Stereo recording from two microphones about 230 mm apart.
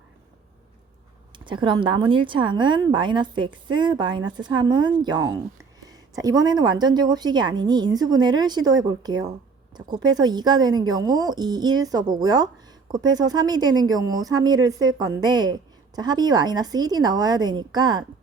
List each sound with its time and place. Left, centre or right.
1.5 s a woman's voice: right